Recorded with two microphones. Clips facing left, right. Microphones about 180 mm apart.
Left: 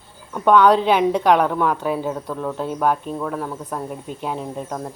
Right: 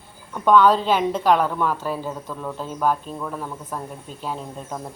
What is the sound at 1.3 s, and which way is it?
A woman's voice, 15° left (ahead or behind).